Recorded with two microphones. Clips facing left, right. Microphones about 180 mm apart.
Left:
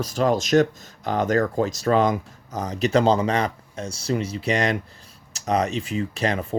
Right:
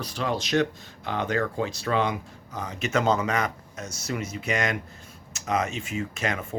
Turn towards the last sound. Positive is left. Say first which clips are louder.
# left 5 dB
turn(degrees=35)  # may be behind; listen again after turning